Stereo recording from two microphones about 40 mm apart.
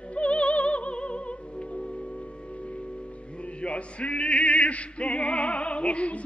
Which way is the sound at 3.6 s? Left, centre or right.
Left.